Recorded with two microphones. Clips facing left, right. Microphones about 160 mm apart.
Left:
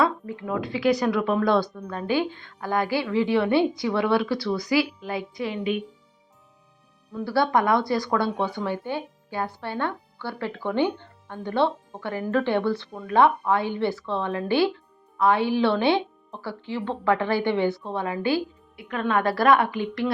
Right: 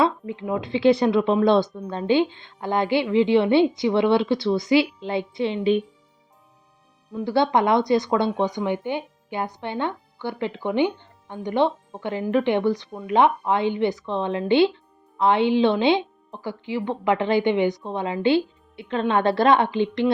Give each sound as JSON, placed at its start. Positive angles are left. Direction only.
{"t": 0.0, "sound": "speech", "side_deg": -20}
{"t": 7.1, "sound": "speech", "side_deg": -20}